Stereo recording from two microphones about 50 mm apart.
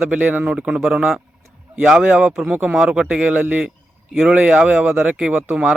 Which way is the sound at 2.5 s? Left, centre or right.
Right.